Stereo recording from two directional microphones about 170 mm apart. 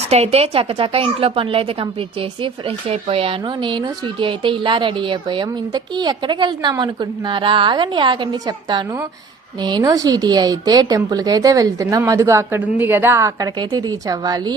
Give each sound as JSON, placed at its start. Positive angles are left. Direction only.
{"t": 0.1, "sound": "a woman's voice", "side_deg": -35}